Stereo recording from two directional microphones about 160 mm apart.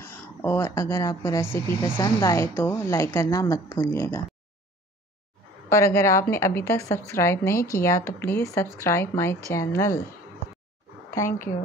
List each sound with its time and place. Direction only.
0.0 s speech: 15° left (ahead or behind)
5.7 s a woman's voice: 15° left (ahead or behind)